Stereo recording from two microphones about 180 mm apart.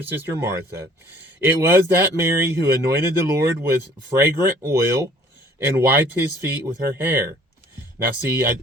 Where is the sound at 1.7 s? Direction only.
15° right (ahead or behind).